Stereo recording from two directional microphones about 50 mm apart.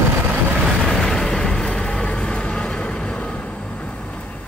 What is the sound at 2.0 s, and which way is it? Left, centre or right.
Vehicle, left.